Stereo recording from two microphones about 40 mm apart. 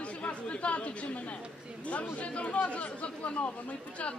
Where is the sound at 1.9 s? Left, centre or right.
Left.